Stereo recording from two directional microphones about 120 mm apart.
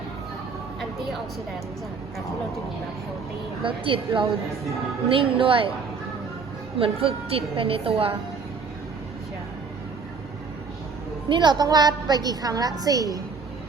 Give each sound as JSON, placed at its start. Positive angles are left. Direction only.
{"t": 3.6, "sound": "a woman's voice", "side_deg": -45}
{"t": 6.7, "sound": "a woman's voice", "side_deg": -50}
{"t": 11.3, "sound": "a woman's voice", "side_deg": -35}